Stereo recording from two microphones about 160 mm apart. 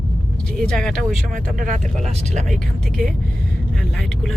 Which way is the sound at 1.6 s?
50° right (ahead or behind).